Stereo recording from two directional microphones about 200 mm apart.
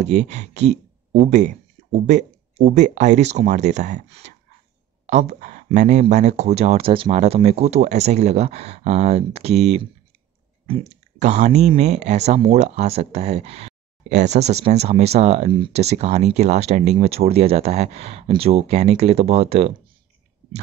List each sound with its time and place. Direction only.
0.0 s speech: 35° right (ahead or behind)